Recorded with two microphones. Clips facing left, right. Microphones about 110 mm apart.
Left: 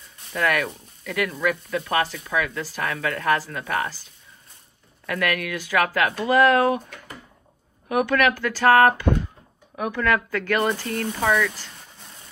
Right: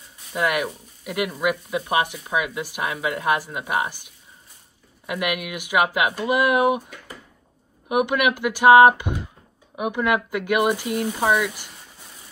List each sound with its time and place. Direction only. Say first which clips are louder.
0.4 s speech: even; 15° right (ahead or behind)
11.1 s speech: even; 25° right (ahead or behind)
11.4 s speech: left 1 dB; 15° right (ahead or behind)